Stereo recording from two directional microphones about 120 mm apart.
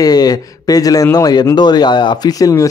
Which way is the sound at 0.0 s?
30° left (ahead or behind).